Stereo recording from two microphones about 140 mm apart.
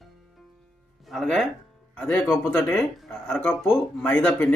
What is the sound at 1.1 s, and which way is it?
Speech, 5° left (ahead or behind).